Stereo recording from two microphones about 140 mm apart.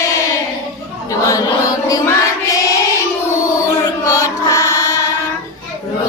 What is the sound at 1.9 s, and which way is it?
Music, 25° left (ahead or behind).